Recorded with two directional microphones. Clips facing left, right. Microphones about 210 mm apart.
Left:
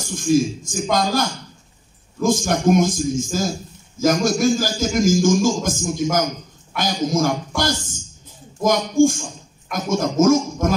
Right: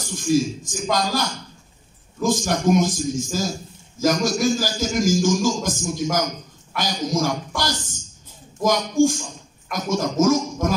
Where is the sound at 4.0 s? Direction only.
50° left (ahead or behind).